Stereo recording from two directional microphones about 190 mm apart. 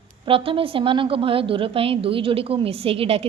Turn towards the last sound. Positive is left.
turn(degrees=-30)  # may be behind; listen again after turning